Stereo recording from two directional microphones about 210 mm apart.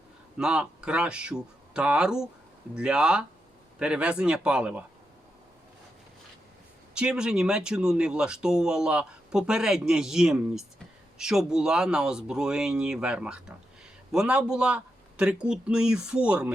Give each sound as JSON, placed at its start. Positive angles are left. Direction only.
{"t": 0.3, "sound": "speech", "side_deg": -5}
{"t": 6.9, "sound": "speech", "side_deg": -5}